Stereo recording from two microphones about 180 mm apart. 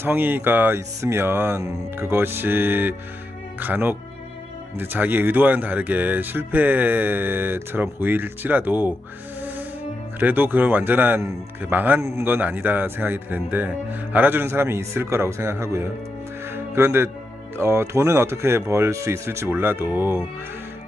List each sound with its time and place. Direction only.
0.0 s speech: 10° right (ahead or behind)
10.2 s speech: 10° right (ahead or behind)
16.6 s music: 15° right (ahead or behind)
17.6 s speech: 15° right (ahead or behind)